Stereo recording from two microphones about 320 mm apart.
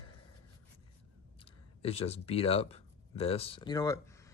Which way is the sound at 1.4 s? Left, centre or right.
Centre.